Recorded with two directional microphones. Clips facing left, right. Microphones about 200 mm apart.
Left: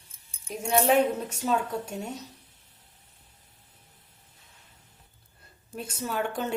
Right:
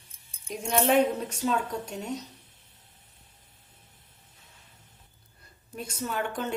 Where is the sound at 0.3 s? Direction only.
5° left (ahead or behind).